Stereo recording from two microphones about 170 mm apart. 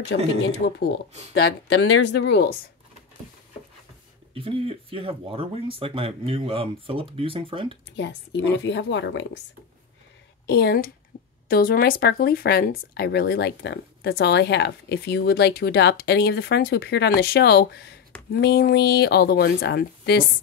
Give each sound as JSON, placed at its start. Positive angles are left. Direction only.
{"t": 0.1, "sound": "a woman's voice", "side_deg": 90}
{"t": 0.5, "sound": "speech", "side_deg": 70}
{"t": 2.0, "sound": "a woman's voice", "side_deg": 90}
{"t": 4.3, "sound": "speech", "side_deg": -30}
{"t": 7.9, "sound": "a woman's voice", "side_deg": 90}
{"t": 10.4, "sound": "speech", "side_deg": 65}